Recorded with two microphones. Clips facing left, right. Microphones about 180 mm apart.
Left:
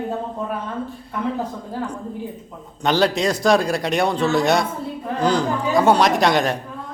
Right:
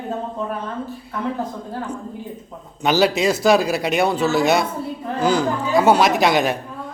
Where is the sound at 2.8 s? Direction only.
5° right (ahead or behind).